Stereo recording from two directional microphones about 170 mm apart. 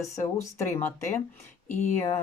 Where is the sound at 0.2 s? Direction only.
15° left (ahead or behind).